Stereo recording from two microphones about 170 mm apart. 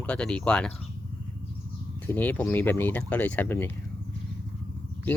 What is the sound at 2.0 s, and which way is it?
Speech, 10° left (ahead or behind).